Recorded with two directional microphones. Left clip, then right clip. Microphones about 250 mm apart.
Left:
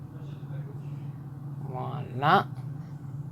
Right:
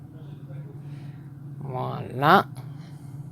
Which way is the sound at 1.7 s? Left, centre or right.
Right.